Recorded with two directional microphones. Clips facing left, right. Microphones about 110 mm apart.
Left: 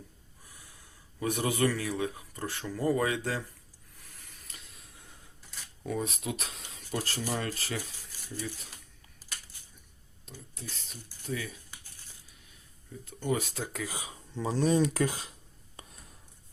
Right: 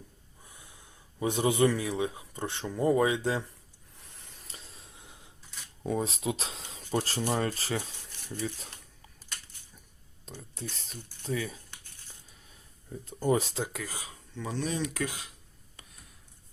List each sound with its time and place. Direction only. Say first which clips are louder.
0.4 s speech: right 2 dB; 20° right (ahead or behind)
4.4 s a sound: right 3 dB; 30° right (ahead or behind)
5.8 s speech: right 3 dB; 25° right (ahead or behind)
8.1 s a sound: right 1 dB; 5° left (ahead or behind)
10.8 s speech: right 3 dB; 35° right (ahead or behind)
13.1 s speech: right 4 dB; 35° right (ahead or behind)
13.8 s speech: left 2 dB; 20° left (ahead or behind)
14.3 s writing: left 6 dB; 35° left (ahead or behind)